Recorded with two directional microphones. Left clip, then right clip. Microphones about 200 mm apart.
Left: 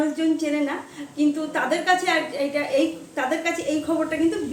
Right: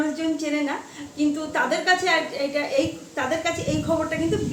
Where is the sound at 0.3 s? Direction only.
Centre (ahead or behind).